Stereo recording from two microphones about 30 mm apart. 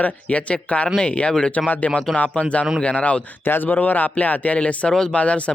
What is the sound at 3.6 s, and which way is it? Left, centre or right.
Speech, left.